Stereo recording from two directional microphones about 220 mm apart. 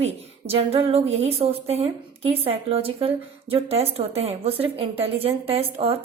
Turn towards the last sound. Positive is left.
turn(degrees=-25)  # may be behind; listen again after turning